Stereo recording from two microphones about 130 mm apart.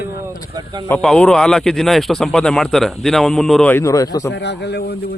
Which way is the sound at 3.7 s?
20° left (ahead or behind).